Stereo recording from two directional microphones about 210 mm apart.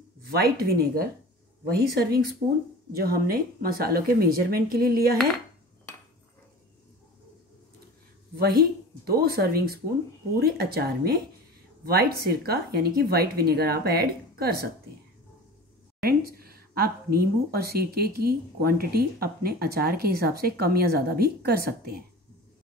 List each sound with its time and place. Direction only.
0.3 s speech: 45° right (ahead or behind)
8.4 s speech: 45° right (ahead or behind)
16.0 s speech: 45° right (ahead or behind)